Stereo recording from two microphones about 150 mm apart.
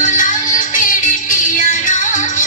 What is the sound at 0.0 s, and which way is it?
Music, 55° left (ahead or behind).